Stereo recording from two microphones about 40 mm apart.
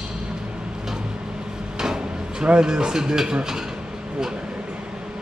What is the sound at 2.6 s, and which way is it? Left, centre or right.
Speech, centre.